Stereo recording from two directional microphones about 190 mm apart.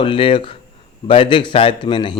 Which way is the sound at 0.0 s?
25° left (ahead or behind).